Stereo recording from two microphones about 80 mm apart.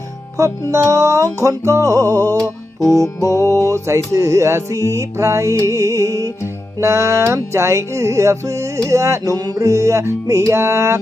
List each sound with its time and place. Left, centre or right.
0.3 s music: right
3.5 s music: right